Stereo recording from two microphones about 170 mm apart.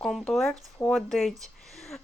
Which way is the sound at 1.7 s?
Centre (ahead or behind).